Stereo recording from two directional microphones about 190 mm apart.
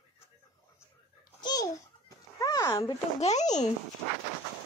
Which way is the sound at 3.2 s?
35° left (ahead or behind).